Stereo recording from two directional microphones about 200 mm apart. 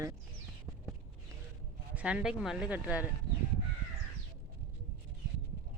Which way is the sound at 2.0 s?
5° right (ahead or behind).